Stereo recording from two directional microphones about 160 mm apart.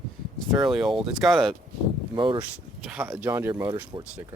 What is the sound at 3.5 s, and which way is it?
Speech, 25° right (ahead or behind).